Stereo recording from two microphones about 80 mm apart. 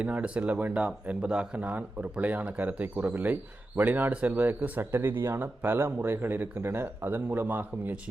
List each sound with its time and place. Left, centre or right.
0.0 s speech: centre